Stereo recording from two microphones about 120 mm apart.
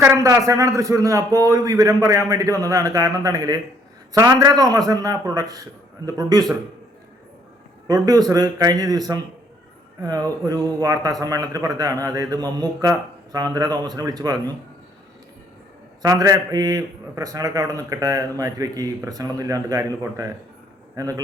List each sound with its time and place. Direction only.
0.0 s a man's voice: 25° right (ahead or behind)
7.9 s a man's voice: 30° right (ahead or behind)
16.0 s a man's voice: 30° right (ahead or behind)